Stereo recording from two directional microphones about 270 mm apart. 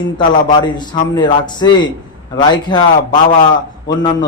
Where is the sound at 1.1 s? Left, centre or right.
Centre.